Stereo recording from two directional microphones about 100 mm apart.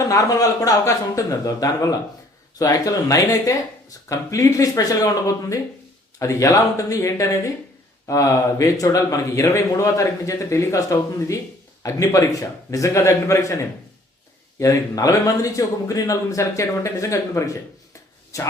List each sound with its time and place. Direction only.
0.1 s speech: 35° left (ahead or behind)